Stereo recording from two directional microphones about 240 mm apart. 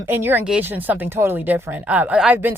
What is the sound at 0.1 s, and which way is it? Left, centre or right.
A woman's voice, centre.